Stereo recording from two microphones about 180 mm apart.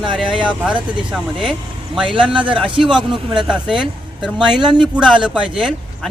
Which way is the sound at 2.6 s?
30° right (ahead or behind).